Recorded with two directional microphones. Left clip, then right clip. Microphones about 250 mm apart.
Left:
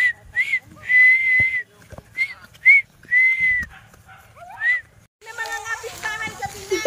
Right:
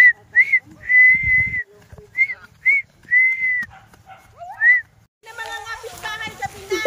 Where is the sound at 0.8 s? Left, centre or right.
Centre.